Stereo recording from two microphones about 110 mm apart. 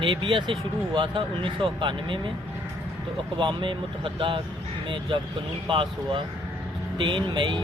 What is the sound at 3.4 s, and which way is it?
Speech, 50° right (ahead or behind).